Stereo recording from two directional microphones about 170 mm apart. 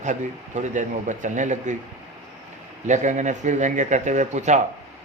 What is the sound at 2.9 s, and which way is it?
A man's voice, 45° right (ahead or behind).